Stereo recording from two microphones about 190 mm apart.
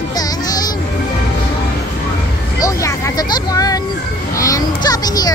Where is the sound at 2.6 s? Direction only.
15° left (ahead or behind).